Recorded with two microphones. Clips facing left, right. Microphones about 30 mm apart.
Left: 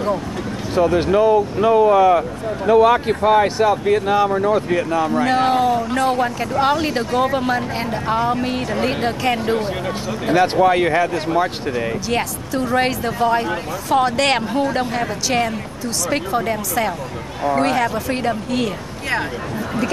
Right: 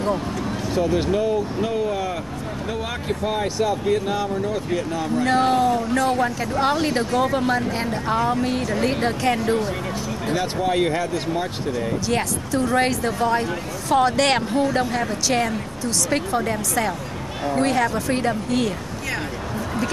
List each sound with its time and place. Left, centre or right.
0.9 s speech: left
5.4 s speech: left
10.3 s speech: left
12.1 s speech: centre